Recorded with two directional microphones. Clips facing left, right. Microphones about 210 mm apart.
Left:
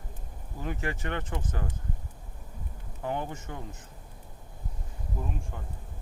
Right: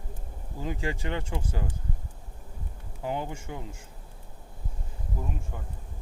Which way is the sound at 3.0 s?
15° right (ahead or behind).